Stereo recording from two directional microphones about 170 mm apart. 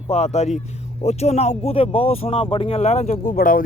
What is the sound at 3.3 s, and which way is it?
Speech, 55° left (ahead or behind).